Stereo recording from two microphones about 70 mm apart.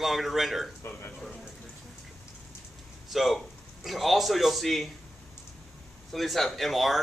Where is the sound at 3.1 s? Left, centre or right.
Centre.